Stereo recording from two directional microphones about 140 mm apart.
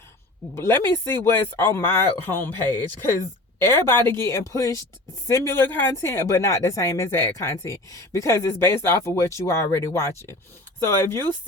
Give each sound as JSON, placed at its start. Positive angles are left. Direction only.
{"t": 0.5, "sound": "speech", "side_deg": 20}
{"t": 3.6, "sound": "speech", "side_deg": 20}